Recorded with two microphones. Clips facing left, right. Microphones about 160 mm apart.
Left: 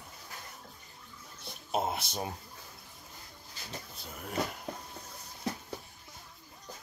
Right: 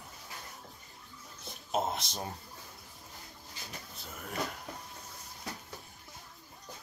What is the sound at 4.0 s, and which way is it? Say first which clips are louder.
Speech: right 1 dB; centre (ahead or behind).